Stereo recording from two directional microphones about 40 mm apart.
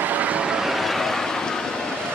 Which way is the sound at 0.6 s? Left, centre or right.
Centre.